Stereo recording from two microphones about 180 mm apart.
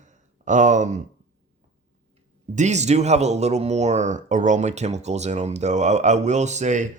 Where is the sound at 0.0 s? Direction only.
45° right (ahead or behind).